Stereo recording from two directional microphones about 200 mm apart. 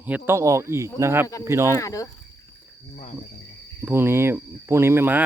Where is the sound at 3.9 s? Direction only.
10° right (ahead or behind).